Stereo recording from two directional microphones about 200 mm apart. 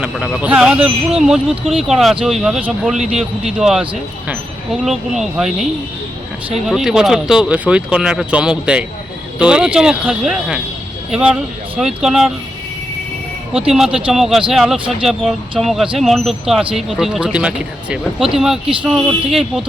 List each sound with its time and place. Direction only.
0.0 s speech: centre (ahead or behind)
13.7 s speech: centre (ahead or behind)